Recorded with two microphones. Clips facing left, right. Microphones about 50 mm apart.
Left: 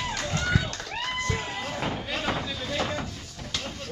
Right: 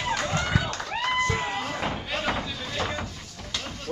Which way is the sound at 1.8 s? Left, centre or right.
Centre.